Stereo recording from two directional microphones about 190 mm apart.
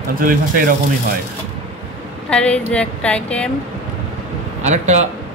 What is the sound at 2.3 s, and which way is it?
Speech, 5° left (ahead or behind).